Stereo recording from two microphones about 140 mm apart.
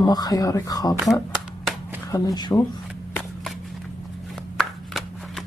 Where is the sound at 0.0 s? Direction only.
30° left (ahead or behind).